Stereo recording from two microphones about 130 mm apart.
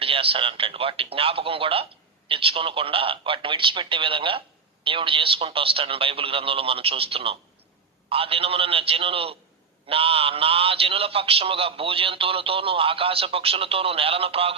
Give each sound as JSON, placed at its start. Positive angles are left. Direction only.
{"t": 0.0, "sound": "a man's voice", "side_deg": -45}